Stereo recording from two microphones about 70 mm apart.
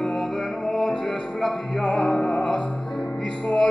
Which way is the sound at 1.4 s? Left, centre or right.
Centre.